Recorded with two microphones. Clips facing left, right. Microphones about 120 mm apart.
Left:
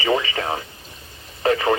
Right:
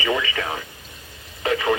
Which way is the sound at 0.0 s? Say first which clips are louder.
Left 3 dB; 30° left (ahead or behind).